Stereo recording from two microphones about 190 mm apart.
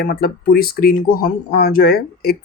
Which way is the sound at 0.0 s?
50° left (ahead or behind).